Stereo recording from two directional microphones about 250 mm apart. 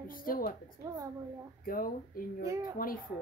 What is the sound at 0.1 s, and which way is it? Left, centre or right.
Speech, left.